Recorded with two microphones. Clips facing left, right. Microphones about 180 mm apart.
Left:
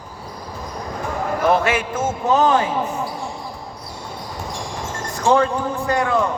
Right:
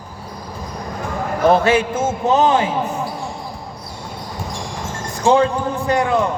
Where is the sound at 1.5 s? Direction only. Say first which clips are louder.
Right 5 dB; 30° right (ahead or behind).